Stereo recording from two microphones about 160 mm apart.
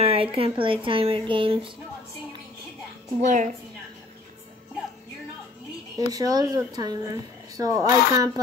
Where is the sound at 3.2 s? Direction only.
50° right (ahead or behind).